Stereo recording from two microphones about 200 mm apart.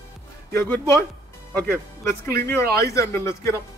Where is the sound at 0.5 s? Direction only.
10° left (ahead or behind).